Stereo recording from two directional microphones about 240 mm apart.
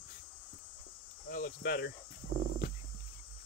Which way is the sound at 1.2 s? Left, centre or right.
Left.